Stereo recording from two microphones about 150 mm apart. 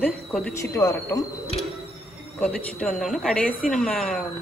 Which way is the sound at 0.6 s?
20° left (ahead or behind).